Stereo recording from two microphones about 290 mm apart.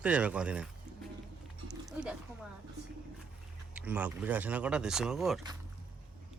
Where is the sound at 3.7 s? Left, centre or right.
Centre.